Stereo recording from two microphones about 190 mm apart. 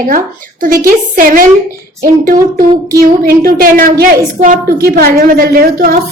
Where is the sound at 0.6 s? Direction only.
45° right (ahead or behind).